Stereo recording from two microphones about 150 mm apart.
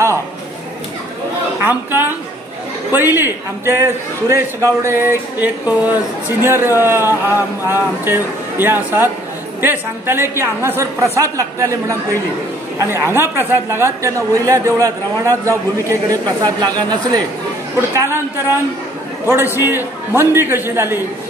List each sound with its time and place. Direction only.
1.6 s speech: 15° right (ahead or behind)
19.2 s a man's voice: 15° right (ahead or behind)